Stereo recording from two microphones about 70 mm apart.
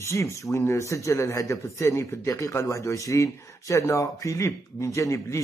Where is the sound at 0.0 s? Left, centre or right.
Left.